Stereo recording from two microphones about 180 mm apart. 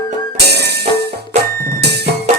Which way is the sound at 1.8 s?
65° right (ahead or behind).